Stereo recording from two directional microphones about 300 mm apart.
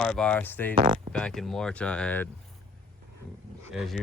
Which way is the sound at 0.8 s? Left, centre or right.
Centre.